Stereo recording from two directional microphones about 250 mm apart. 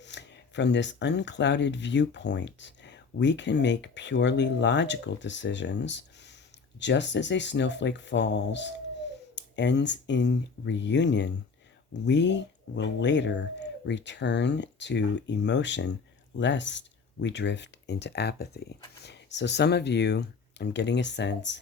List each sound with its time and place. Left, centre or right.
0.0 s speech: left